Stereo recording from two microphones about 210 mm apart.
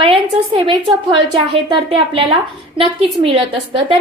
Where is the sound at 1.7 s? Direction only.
25° right (ahead or behind).